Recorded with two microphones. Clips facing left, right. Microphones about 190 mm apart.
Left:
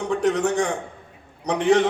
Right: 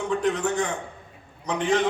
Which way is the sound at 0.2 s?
75° left (ahead or behind).